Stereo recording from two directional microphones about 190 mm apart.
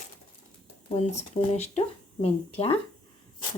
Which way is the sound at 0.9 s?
35° left (ahead or behind).